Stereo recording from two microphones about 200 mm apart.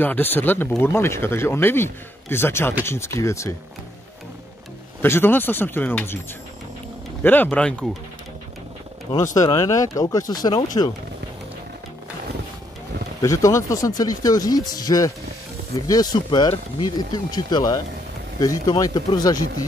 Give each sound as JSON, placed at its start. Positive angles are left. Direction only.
{"t": 0.0, "sound": "speech", "side_deg": 10}
{"t": 5.0, "sound": "speech", "side_deg": 10}
{"t": 7.2, "sound": "speech", "side_deg": 10}
{"t": 9.3, "sound": "speech", "side_deg": 20}
{"t": 13.2, "sound": "speech", "side_deg": 15}